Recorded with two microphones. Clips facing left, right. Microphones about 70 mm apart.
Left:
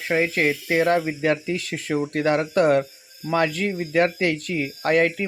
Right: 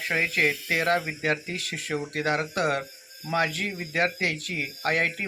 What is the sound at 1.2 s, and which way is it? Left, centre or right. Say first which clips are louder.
Speech: left 6 dB; left.